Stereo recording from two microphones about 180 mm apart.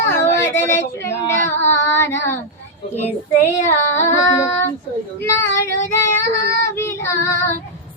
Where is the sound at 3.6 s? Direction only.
15° left (ahead or behind).